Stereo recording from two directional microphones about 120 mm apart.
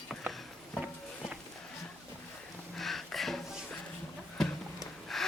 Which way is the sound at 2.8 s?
Centre (ahead or behind).